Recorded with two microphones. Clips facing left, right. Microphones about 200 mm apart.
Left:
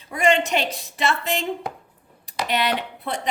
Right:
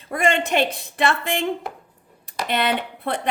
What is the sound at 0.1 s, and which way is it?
Speech, 50° right (ahead or behind).